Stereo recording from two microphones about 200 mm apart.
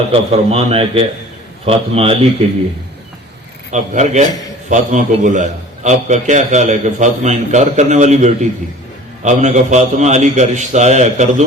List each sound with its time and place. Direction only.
0.1 s a man's voice: 30° right (ahead or behind)
3.7 s a man's voice: 35° right (ahead or behind)